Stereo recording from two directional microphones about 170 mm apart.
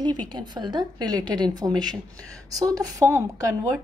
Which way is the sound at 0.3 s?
25° right (ahead or behind).